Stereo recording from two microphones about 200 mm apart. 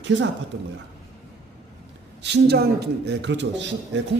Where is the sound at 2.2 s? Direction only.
55° right (ahead or behind).